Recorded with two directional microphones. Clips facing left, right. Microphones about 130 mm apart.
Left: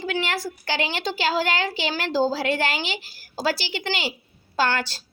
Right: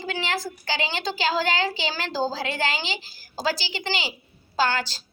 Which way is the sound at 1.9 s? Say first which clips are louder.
Left 4 dB; 55° left (ahead or behind).